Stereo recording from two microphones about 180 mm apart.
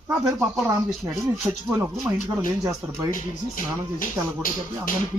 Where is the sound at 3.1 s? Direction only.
50° left (ahead or behind).